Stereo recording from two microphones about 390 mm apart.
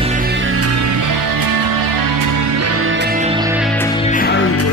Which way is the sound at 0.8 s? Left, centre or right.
Right.